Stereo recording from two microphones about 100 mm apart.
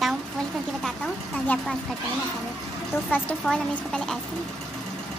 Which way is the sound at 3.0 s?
15° left (ahead or behind).